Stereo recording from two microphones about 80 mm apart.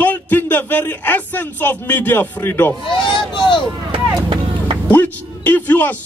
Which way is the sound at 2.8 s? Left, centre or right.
Left.